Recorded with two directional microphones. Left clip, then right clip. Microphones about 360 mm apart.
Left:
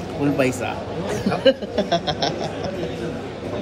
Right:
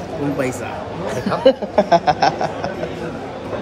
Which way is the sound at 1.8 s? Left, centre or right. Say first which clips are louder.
Right 8 dB; centre.